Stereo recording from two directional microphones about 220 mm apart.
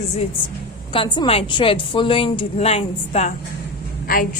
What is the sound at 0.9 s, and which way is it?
A woman's voice, 20° left (ahead or behind).